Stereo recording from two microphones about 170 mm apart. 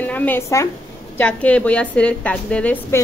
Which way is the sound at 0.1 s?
10° left (ahead or behind).